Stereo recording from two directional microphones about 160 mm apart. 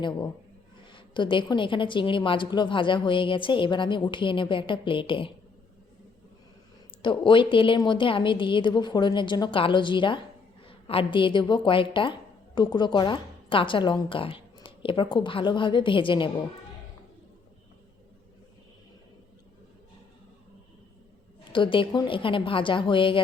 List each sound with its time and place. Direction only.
0.9 s a woman's voice: 30° left (ahead or behind)
7.0 s a woman's voice: 30° left (ahead or behind)
21.5 s a woman's voice: 30° left (ahead or behind)